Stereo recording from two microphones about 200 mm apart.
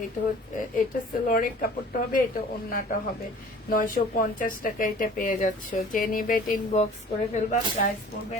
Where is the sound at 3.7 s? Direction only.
45° left (ahead or behind).